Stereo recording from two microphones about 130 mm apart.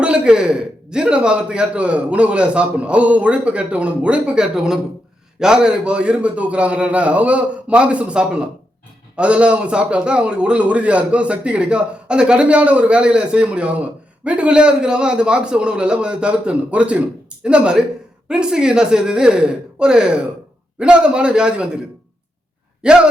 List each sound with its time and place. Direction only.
0.0 s a man's voice: 10° right (ahead or behind)
22.8 s a man's voice: 5° right (ahead or behind)